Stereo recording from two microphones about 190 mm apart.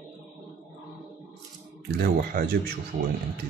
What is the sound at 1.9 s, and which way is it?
Speech, 50° right (ahead or behind).